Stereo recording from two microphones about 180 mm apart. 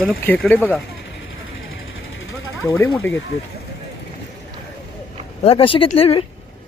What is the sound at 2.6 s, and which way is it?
Speech, 15° left (ahead or behind).